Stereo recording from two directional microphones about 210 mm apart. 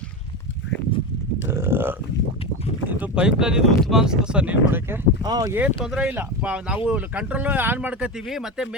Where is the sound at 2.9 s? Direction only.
5° right (ahead or behind).